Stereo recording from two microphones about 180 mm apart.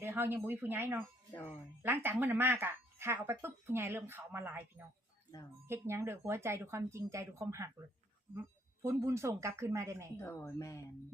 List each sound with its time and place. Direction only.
0.0 s speech: 10° right (ahead or behind)
5.6 s speech: 15° right (ahead or behind)
10.2 s a woman's voice: 15° left (ahead or behind)